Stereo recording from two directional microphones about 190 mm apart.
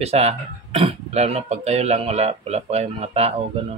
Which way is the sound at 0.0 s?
35° right (ahead or behind).